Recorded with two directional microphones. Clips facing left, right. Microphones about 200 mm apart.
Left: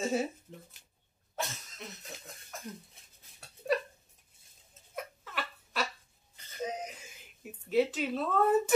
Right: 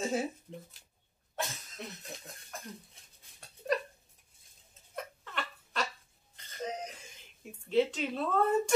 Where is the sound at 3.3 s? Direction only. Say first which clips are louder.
Left 1 dB; centre (ahead or behind).